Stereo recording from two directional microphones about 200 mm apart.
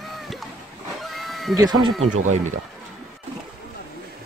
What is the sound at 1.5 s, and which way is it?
Speech, 20° right (ahead or behind).